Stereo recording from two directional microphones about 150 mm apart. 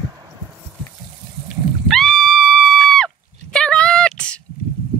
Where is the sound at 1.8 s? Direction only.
Centre (ahead or behind).